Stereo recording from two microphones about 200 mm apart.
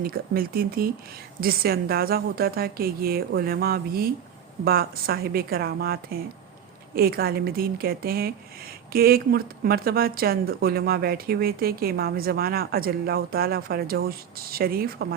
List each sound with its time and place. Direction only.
0.0 s speech: 50° right (ahead or behind)